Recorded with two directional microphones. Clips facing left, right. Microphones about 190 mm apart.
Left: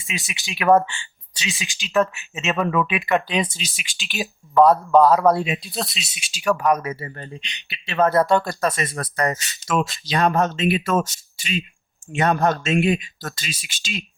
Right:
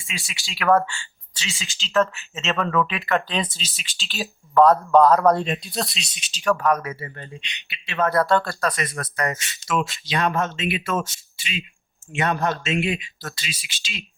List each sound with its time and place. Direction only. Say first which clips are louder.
0.0 s speech: left 4 dB; 20° left (ahead or behind)
7.0 s speech: left 2 dB; 40° left (ahead or behind)